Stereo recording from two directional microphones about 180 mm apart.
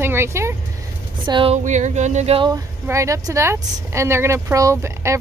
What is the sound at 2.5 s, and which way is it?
Speech, 15° right (ahead or behind).